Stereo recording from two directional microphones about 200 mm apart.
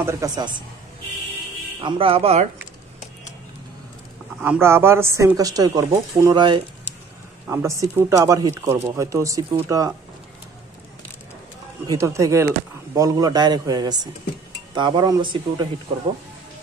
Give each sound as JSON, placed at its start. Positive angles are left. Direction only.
{"t": 0.0, "sound": "speech", "side_deg": -15}
{"t": 1.8, "sound": "speech", "side_deg": -25}
{"t": 4.4, "sound": "speech", "side_deg": -10}
{"t": 11.9, "sound": "speech", "side_deg": -15}